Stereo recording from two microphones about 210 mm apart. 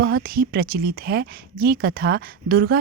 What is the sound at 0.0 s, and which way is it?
Speech, 45° right (ahead or behind).